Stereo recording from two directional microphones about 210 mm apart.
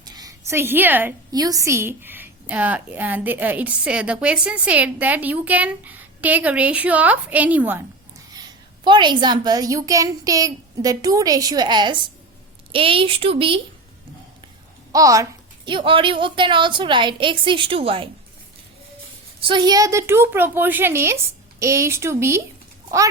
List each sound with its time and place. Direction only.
0.0 s a woman's voice: 20° right (ahead or behind)
14.9 s a woman's voice: 15° right (ahead or behind)
19.5 s a woman's voice: 20° right (ahead or behind)